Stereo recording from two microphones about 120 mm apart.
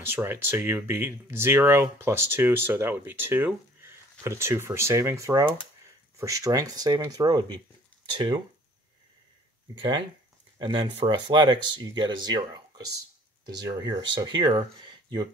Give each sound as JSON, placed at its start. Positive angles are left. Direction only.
{"t": 0.1, "sound": "speech", "side_deg": -20}
{"t": 9.8, "sound": "speech", "side_deg": -40}